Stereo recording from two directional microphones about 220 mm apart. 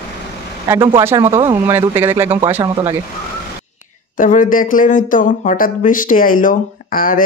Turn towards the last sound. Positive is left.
turn(degrees=40)  # may be behind; listen again after turning